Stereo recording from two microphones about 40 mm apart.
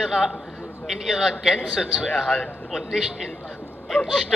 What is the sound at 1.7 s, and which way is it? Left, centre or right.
Speech, centre.